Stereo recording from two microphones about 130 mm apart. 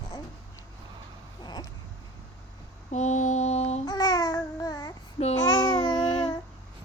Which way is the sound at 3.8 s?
30° left (ahead or behind).